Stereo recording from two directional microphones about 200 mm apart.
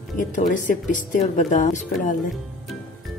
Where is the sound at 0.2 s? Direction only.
40° left (ahead or behind).